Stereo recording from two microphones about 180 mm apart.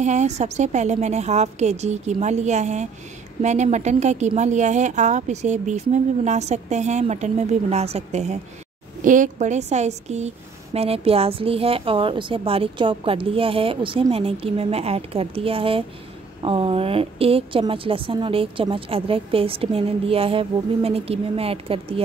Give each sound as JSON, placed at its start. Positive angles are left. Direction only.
{"t": 0.0, "sound": "a woman's voice", "side_deg": -40}